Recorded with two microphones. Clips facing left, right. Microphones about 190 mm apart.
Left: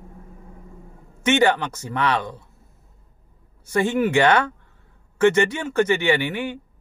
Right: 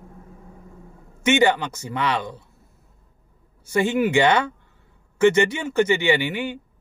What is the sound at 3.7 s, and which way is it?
Speech, 15° right (ahead or behind).